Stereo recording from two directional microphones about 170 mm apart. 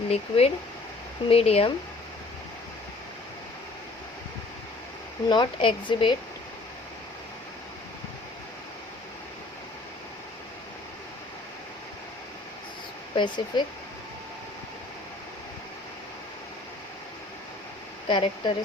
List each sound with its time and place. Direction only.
0.1 s speech: 35° left (ahead or behind)
5.3 s speech: 25° left (ahead or behind)
13.1 s speech: 25° left (ahead or behind)
18.1 s speech: 30° left (ahead or behind)